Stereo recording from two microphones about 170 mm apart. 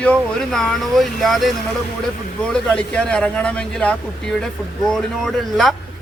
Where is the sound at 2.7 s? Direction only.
5° left (ahead or behind).